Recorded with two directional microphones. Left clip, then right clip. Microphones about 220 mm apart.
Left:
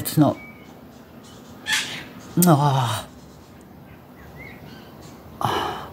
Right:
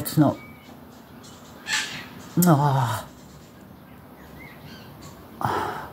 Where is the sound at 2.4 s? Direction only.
5° left (ahead or behind).